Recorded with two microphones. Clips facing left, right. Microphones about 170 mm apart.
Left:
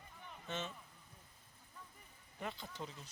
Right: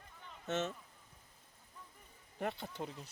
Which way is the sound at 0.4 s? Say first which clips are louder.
Right 7 dB; 75° right (ahead or behind).